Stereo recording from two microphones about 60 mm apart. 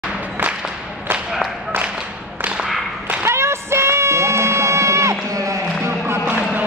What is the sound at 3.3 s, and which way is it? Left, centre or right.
Child singing, right.